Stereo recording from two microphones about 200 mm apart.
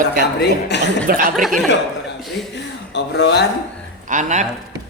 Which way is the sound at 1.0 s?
45° right (ahead or behind).